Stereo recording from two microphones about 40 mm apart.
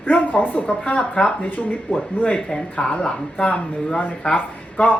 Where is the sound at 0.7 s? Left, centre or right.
Left.